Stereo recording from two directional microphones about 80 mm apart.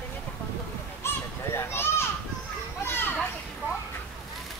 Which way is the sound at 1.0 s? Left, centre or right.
Left.